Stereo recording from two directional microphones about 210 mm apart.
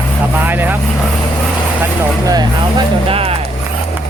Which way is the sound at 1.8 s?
15° right (ahead or behind).